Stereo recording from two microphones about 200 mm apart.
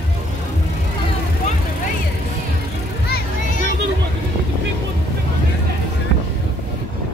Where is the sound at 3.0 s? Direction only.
45° left (ahead or behind).